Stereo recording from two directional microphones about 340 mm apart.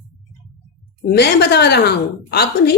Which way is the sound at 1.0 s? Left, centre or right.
Left.